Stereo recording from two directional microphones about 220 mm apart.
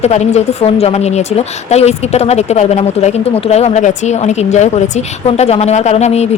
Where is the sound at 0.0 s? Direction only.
30° left (ahead or behind).